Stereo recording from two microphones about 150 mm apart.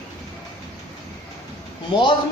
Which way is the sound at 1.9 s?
30° left (ahead or behind).